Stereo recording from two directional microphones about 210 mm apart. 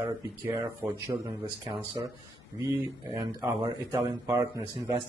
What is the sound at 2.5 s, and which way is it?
Speech, 15° right (ahead or behind).